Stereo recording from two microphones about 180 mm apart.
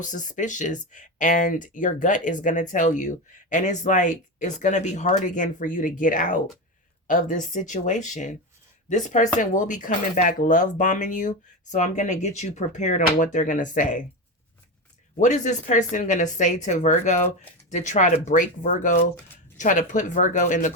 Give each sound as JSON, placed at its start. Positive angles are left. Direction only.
{"t": 0.0, "sound": "speech", "side_deg": 45}
{"t": 15.2, "sound": "speech", "side_deg": 40}